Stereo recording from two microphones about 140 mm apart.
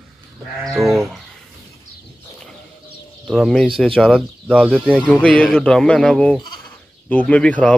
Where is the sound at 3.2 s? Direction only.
Centre (ahead or behind).